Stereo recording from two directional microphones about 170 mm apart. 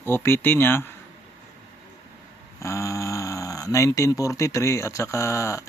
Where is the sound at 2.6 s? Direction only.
15° left (ahead or behind).